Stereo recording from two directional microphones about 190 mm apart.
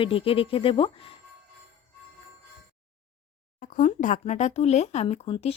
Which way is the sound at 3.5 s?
45° left (ahead or behind).